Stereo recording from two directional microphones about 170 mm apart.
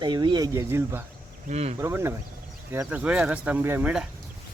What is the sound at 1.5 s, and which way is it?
Speech, 40° right (ahead or behind).